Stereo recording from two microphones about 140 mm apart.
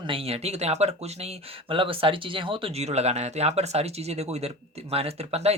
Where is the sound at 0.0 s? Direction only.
40° right (ahead or behind).